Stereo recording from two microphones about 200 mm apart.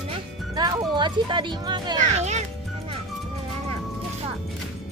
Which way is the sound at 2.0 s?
35° right (ahead or behind).